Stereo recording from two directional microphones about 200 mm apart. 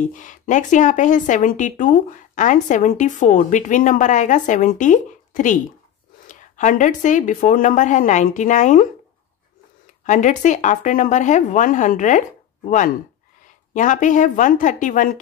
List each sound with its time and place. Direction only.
0.0 s a woman's voice: 40° left (ahead or behind)
10.0 s a woman's voice: 40° left (ahead or behind)